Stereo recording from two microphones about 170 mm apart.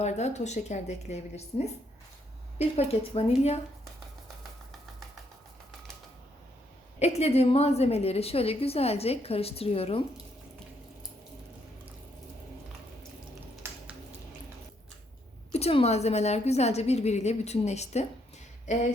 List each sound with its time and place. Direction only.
0.0 s a woman's voice: 40° left (ahead or behind)
7.0 s a woman's voice: 40° left (ahead or behind)
13.6 s a sound: 15° right (ahead or behind)
15.5 s a woman's voice: 40° left (ahead or behind)